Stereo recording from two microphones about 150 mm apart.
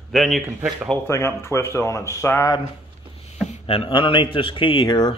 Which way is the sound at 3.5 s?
40° left (ahead or behind).